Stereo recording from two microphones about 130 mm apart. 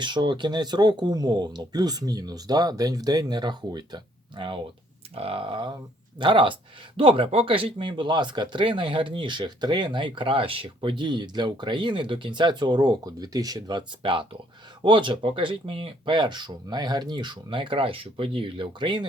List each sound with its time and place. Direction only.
0.0 s speech: 35° right (ahead or behind)